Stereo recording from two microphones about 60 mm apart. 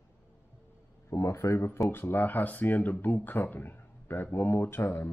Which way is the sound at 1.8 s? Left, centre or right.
Left.